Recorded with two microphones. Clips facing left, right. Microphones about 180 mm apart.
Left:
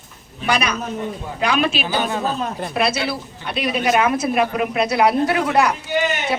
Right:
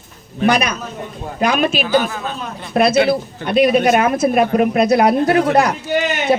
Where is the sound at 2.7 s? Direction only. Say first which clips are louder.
Right 9 dB; 50° right (ahead or behind).